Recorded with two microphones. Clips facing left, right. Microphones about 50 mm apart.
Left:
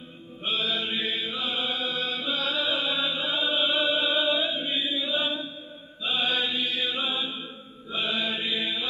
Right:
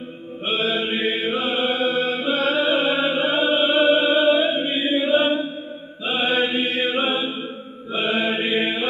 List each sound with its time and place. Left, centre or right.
0.5 s mantra: right
6.0 s chant: right
7.9 s mantra: right